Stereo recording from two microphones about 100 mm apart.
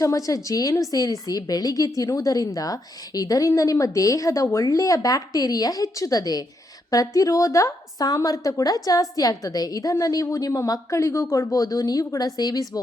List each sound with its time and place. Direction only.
0.0 s a woman's voice: 35° left (ahead or behind)